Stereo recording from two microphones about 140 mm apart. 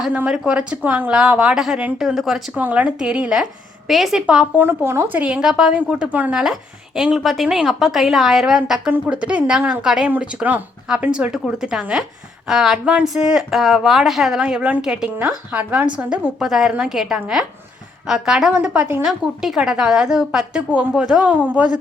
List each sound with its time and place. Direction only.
0.0 s speech: 10° right (ahead or behind)